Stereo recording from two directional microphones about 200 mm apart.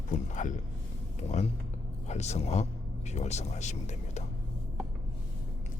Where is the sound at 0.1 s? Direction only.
40° left (ahead or behind).